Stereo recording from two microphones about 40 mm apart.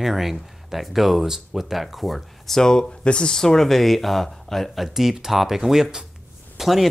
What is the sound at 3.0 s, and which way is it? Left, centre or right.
Speech, left.